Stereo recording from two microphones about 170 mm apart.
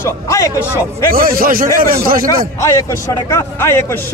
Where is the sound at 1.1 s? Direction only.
55° right (ahead or behind).